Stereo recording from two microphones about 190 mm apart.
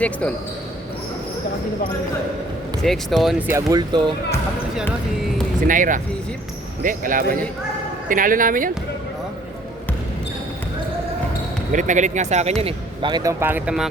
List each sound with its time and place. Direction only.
2.8 s speech: centre (ahead or behind); by 4.1 s 20° right (ahead or behind)
5.6 s speech: 45° right (ahead or behind)
11.7 s speech: 40° right (ahead or behind); by 13.8 s 10° right (ahead or behind)